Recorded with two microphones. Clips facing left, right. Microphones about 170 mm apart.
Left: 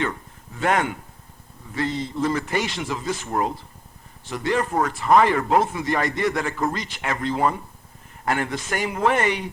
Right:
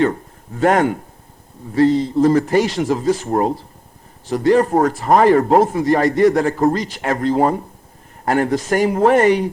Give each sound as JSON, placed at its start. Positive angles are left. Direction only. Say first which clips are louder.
{"t": 0.0, "sound": "speech", "louder": "right 10 dB", "side_deg": -40}